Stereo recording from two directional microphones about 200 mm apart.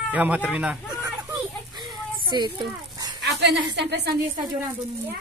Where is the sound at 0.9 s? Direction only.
15° right (ahead or behind).